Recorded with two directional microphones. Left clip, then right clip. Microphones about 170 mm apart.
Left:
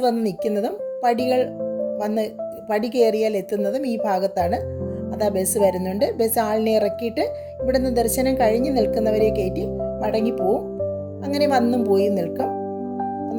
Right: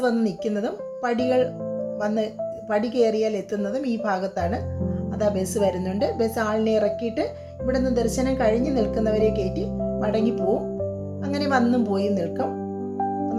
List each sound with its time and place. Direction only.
0.0 s a woman's voice: 45° left (ahead or behind)